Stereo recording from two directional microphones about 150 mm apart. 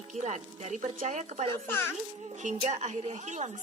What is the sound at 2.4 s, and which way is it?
Speech, 50° right (ahead or behind).